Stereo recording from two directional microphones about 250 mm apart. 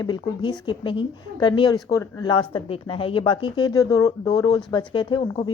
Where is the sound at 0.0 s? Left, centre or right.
Centre.